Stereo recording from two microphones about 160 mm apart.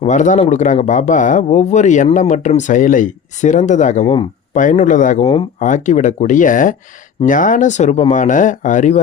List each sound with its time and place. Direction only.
0.0 s speech: 50° left (ahead or behind)